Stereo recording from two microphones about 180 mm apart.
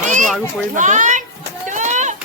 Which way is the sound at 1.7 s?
45° right (ahead or behind).